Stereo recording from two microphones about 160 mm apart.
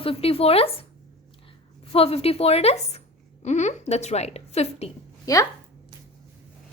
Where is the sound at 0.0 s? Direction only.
35° left (ahead or behind).